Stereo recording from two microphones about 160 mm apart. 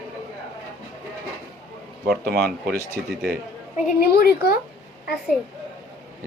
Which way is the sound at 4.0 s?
75° left (ahead or behind).